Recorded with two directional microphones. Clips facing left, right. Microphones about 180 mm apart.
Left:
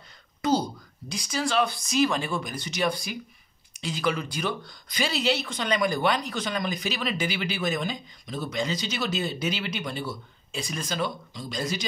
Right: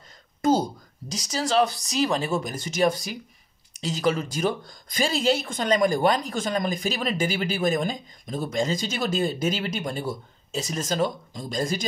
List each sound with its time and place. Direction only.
0.4 s speech: 45° right (ahead or behind)